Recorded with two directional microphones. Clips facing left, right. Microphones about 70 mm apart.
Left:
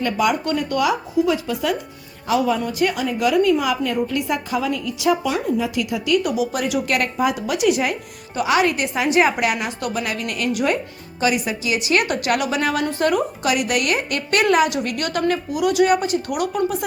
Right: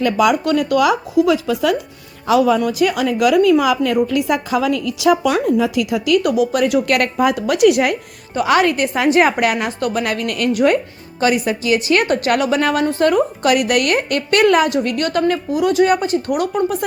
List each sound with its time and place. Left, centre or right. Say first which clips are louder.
0.0 s a woman's voice: right 5 dB; right
2.6 s a woman's voice: right 5 dB; right
6.2 s a woman's voice: right 6 dB; right
8.4 s a woman's voice: right 4 dB; right